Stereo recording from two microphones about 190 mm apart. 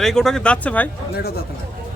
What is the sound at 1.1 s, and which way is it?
Speech, 55° left (ahead or behind).